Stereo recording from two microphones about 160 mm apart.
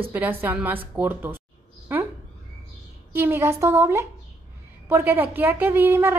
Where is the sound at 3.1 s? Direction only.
15° right (ahead or behind).